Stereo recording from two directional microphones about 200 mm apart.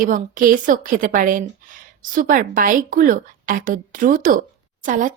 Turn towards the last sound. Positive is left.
turn(degrees=-40)  # may be behind; listen again after turning